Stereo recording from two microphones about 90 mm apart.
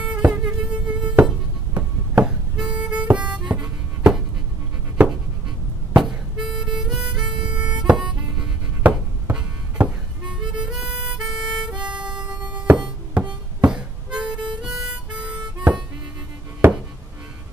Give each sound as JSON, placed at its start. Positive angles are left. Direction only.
{"t": 0.0, "sound": "insect", "side_deg": -10}
{"t": 1.7, "sound": "a sound", "side_deg": -20}
{"t": 2.2, "sound": "harmonica", "side_deg": -10}
{"t": 3.3, "sound": "music", "side_deg": -15}
{"t": 5.0, "sound": "a sound", "side_deg": -20}
{"t": 5.9, "sound": "harmonica", "side_deg": -5}
{"t": 7.8, "sound": "music", "side_deg": -10}
{"t": 10.4, "sound": "harmonica", "side_deg": -10}